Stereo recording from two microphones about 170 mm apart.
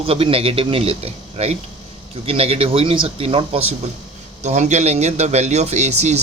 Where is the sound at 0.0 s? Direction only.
35° right (ahead or behind).